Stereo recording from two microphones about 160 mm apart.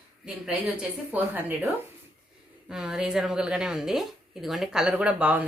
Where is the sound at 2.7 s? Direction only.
5° right (ahead or behind).